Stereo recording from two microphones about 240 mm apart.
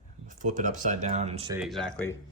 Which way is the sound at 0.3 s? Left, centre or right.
Right.